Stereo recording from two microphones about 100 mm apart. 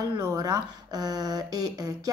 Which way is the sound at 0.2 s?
40° right (ahead or behind).